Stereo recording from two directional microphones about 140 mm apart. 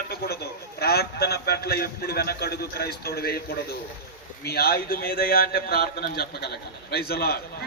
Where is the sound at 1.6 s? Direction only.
90° left.